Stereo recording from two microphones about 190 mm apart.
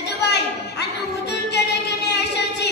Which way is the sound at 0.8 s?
60° left (ahead or behind).